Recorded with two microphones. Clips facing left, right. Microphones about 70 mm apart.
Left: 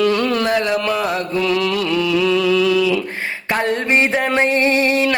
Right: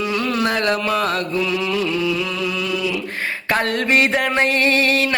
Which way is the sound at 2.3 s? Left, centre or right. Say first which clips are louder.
Left 8 dB; left.